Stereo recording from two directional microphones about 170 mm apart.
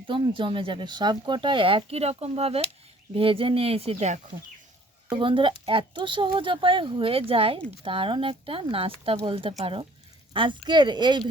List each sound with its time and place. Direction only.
0.1 s speech: 30° right (ahead or behind)